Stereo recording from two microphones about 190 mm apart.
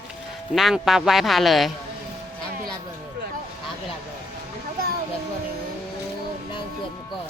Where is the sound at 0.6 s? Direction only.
Centre (ahead or behind).